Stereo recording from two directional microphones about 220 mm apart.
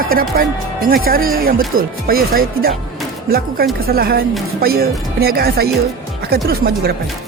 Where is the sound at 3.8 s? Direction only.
45° right (ahead or behind).